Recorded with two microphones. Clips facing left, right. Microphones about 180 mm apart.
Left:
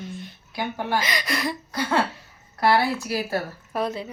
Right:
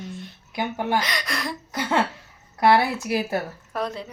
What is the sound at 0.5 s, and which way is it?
Speech, 20° right (ahead or behind).